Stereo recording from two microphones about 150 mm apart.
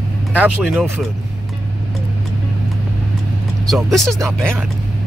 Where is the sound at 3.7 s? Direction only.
Centre (ahead or behind).